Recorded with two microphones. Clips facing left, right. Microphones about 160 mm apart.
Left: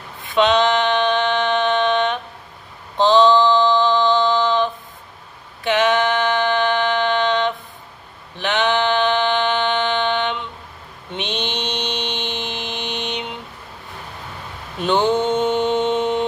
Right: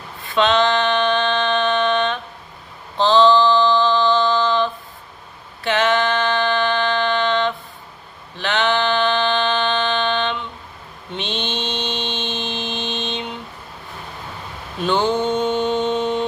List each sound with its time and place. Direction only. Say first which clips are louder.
0.3 s a sound: left 1 dB; 20° left (ahead or behind)
11.1 s mantra: even; 20° left (ahead or behind)
14.8 s mantra: left 1 dB; 20° left (ahead or behind)